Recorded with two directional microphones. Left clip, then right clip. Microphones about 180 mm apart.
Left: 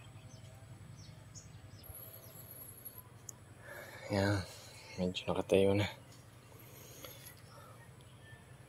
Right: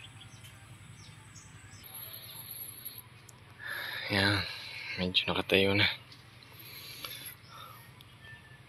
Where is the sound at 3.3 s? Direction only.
15° left (ahead or behind).